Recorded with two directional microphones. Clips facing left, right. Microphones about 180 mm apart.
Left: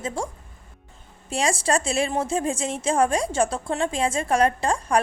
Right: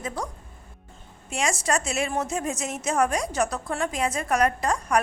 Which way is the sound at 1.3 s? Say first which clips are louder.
Left 3 dB; 30° left (ahead or behind).